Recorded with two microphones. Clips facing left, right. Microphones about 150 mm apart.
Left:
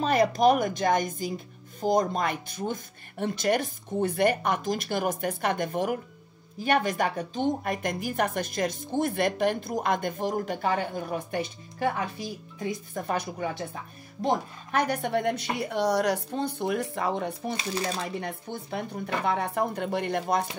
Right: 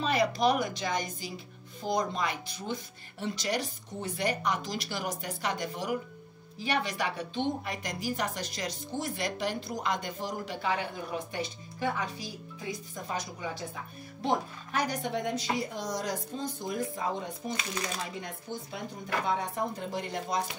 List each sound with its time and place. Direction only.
0.0 s a woman's voice: 45° left (ahead or behind)